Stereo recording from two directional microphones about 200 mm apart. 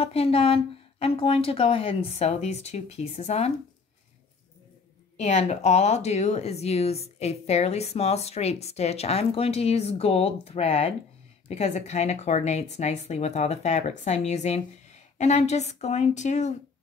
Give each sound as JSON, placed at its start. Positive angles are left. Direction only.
{"t": 0.0, "sound": "speech", "side_deg": 30}
{"t": 5.1, "sound": "speech", "side_deg": 35}